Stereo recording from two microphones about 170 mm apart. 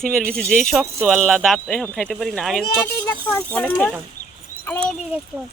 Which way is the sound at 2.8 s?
15° left (ahead or behind).